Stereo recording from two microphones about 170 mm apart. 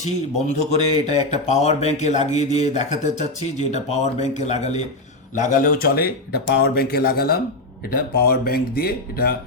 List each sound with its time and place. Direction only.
0.0 s speech: 40° left (ahead or behind); by 9.3 s 65° left (ahead or behind)